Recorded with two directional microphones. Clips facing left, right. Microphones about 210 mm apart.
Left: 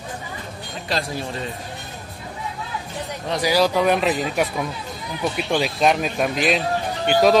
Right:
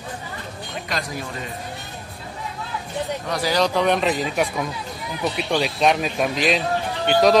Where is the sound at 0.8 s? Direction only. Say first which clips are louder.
Left 4 dB; 30° left (ahead or behind).